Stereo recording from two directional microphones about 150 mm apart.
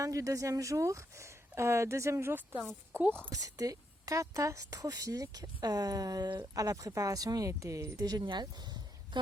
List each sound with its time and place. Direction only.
0.0 s speech: 20° right (ahead or behind)